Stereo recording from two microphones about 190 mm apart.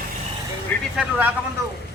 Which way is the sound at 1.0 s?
5° right (ahead or behind).